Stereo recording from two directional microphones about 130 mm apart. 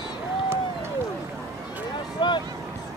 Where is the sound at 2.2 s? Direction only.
35° left (ahead or behind).